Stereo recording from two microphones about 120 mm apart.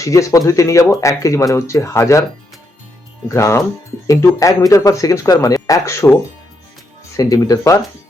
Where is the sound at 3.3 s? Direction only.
25° left (ahead or behind).